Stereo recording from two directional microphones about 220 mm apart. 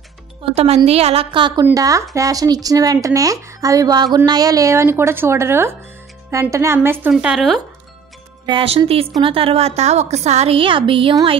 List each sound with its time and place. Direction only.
0.4 s a woman's voice: 25° right (ahead or behind); by 7.6 s centre (ahead or behind)
8.5 s a woman's voice: 25° right (ahead or behind)